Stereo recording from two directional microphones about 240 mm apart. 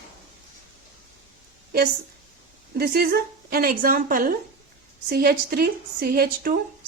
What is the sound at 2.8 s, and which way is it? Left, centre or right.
A woman's voice, right.